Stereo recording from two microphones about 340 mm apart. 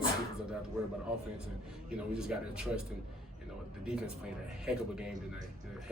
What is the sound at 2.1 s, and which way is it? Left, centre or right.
Speech, centre.